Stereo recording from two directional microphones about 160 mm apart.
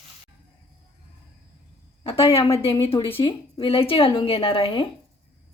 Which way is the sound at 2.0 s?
35° left (ahead or behind).